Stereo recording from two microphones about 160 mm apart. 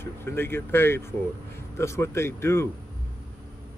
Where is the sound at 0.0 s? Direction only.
15° left (ahead or behind).